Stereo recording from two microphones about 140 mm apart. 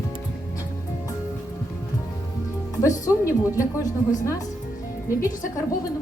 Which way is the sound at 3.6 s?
25° left (ahead or behind).